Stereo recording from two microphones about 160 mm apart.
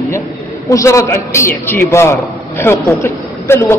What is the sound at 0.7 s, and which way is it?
A man's voice, 20° left (ahead or behind).